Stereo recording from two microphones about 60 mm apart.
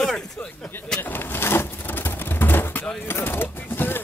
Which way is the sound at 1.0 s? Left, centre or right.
Left.